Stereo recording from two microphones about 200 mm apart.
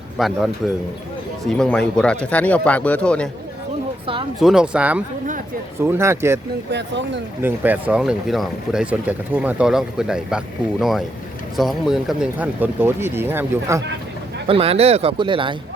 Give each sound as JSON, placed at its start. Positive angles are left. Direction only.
{"t": 0.2, "sound": "speech", "side_deg": 0}
{"t": 4.4, "sound": "speech", "side_deg": 0}
{"t": 6.7, "sound": "speech", "side_deg": -60}
{"t": 7.4, "sound": "speech", "side_deg": -10}
{"t": 14.4, "sound": "speech", "side_deg": -30}